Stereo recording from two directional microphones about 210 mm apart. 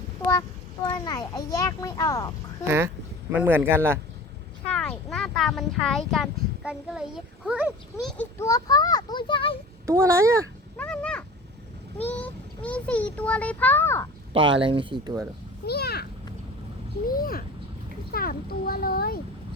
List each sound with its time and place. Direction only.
0.3 s a child's voice: 15° left (ahead or behind)
2.6 s speech: 10° right (ahead or behind)
4.7 s speech: 5° left (ahead or behind)
8.0 s a child's voice: 10° left (ahead or behind)
9.8 s speech: 15° right (ahead or behind)
10.8 s a sound: 5° left (ahead or behind)
12.6 s a child's voice: 5° left (ahead or behind)
14.3 s speech: 25° right (ahead or behind)
15.6 s a child's voice: 50° left (ahead or behind)
17.1 s a child's voice: 45° left (ahead or behind)